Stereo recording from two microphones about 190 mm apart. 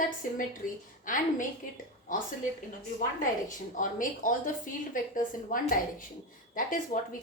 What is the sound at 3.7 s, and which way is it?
Speech, 45° left (ahead or behind).